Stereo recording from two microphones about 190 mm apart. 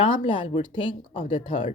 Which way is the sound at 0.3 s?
30° left (ahead or behind).